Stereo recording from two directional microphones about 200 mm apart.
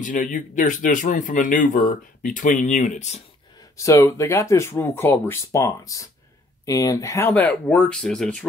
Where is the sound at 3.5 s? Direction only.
15° left (ahead or behind).